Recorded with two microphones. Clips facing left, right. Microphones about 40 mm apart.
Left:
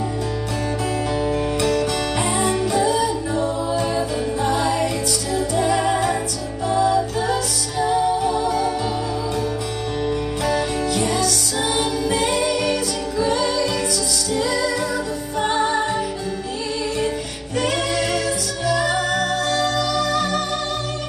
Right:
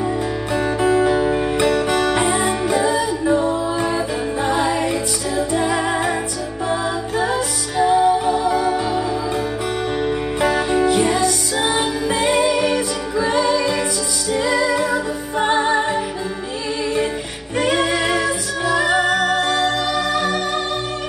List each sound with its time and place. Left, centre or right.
0.8 s music: right
10.4 s music: right
17.6 s music: right